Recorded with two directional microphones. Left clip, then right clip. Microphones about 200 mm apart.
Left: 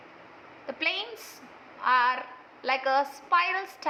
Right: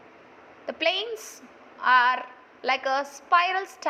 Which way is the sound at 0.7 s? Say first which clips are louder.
Right 4 dB; 25° right (ahead or behind).